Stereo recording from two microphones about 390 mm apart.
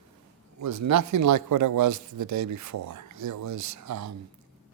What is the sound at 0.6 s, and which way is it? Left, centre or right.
Speech, right.